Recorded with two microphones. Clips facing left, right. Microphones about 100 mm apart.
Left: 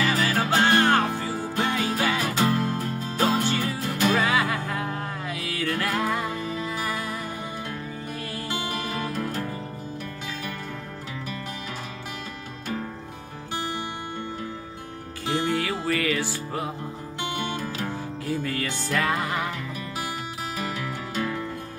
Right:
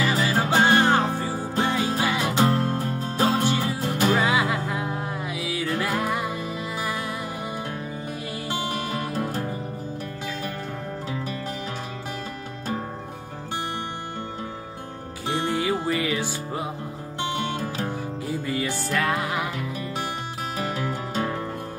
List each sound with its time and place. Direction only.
0.0 s music: 15° right (ahead or behind)
2.4 s music: 35° right (ahead or behind)
3.2 s music: 20° right (ahead or behind)
9.1 s music: 30° right (ahead or behind)
15.4 s music: 20° right (ahead or behind)
17.2 s music: 30° right (ahead or behind)
18.2 s music: 10° right (ahead or behind)
18.9 s music: centre (ahead or behind)
20.5 s music: 30° right (ahead or behind)